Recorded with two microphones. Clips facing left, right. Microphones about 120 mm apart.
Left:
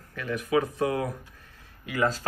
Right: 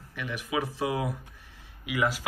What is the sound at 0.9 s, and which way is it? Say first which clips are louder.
Speech: left 2 dB; 10° right (ahead or behind).